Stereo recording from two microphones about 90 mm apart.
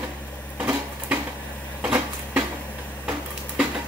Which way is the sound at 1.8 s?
15° right (ahead or behind).